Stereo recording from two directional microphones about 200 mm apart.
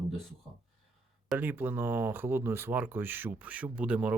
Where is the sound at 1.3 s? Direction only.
10° right (ahead or behind).